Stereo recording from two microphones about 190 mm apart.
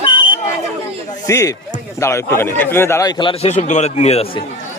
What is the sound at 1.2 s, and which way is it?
A man's voice, 15° left (ahead or behind).